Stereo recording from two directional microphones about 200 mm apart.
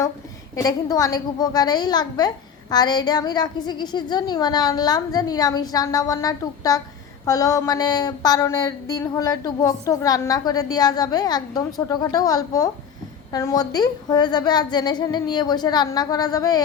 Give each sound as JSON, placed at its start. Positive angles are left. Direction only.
{"t": 0.5, "sound": "a woman's voice", "side_deg": 20}